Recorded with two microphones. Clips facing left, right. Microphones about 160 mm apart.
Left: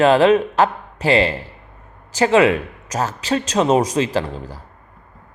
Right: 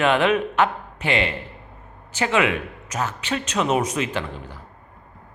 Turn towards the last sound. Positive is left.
turn(degrees=35)  # may be behind; listen again after turning